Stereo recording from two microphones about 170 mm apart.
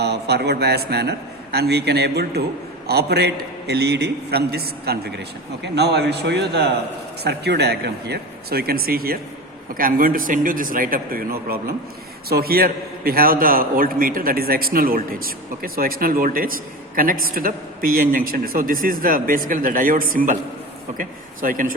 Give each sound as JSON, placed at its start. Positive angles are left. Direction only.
{"t": 0.0, "sound": "a man's voice", "side_deg": -75}